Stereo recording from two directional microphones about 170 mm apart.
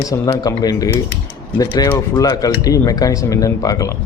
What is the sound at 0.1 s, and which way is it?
Speech, 20° left (ahead or behind).